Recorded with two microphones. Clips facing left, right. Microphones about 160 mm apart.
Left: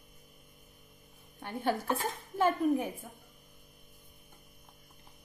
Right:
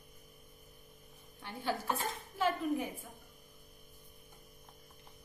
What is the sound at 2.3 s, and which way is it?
Speech, 50° left (ahead or behind).